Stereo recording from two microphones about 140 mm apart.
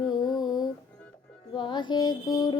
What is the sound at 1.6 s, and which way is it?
Mantra, 35° left (ahead or behind).